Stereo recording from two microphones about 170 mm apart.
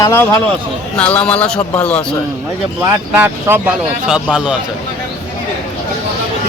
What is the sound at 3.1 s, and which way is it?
Speech, 15° right (ahead or behind).